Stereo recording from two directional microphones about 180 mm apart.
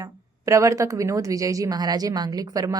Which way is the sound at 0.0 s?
15° right (ahead or behind).